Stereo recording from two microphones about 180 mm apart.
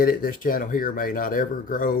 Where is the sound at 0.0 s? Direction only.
55° left (ahead or behind).